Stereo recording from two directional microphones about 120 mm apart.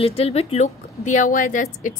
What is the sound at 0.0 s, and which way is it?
A woman's voice, 55° left (ahead or behind).